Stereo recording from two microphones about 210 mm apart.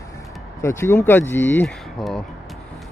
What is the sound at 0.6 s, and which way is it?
Speech, 10° left (ahead or behind).